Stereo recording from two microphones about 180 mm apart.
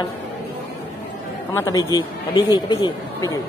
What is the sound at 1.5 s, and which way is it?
Speech, 15° left (ahead or behind).